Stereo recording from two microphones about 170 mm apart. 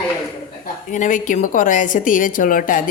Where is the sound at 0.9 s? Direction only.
50° left (ahead or behind).